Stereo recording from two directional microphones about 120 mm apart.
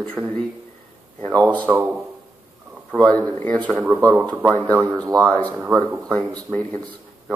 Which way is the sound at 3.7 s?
10° right (ahead or behind).